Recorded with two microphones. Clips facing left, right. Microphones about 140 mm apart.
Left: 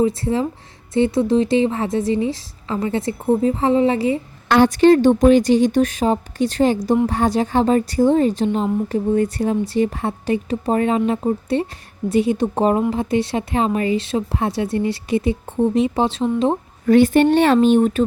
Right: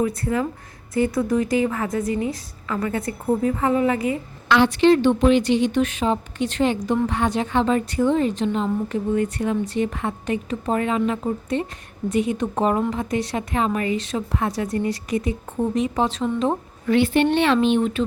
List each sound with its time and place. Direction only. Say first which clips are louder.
0.0 s a woman's voice: left 4 dB; 25° left (ahead or behind)
4.4 s a woman's voice: left 4 dB; 45° left (ahead or behind)